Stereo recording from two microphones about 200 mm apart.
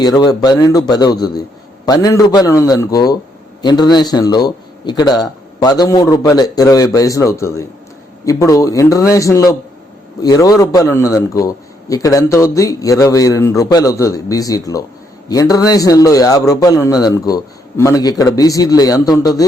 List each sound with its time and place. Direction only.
0.0 s a man's voice: 20° left (ahead or behind)